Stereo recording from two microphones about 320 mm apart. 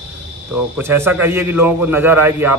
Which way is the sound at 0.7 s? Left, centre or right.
Centre.